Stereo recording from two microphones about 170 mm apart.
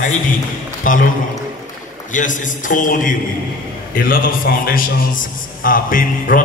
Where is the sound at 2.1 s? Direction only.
50° left (ahead or behind).